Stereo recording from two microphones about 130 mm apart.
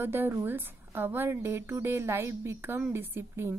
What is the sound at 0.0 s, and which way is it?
A woman's voice, 15° right (ahead or behind).